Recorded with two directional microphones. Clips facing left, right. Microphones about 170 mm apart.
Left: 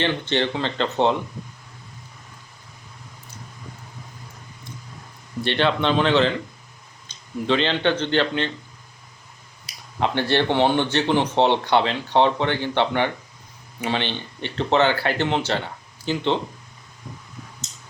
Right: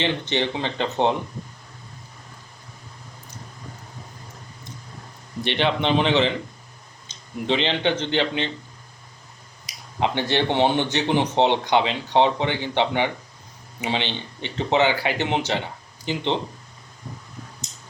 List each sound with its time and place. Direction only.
0.0 s speech: 15° right (ahead or behind)
5.4 s speech: 15° right (ahead or behind)
9.6 s speech: 15° right (ahead or behind)